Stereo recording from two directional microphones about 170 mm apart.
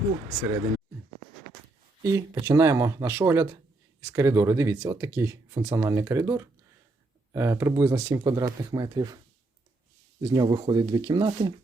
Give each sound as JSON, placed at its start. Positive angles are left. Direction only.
{"t": 2.0, "sound": "speech", "side_deg": -20}
{"t": 10.2, "sound": "speech", "side_deg": -20}